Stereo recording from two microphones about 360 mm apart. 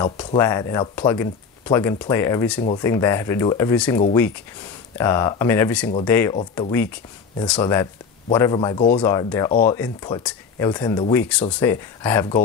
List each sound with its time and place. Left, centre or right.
0.0 s speech: centre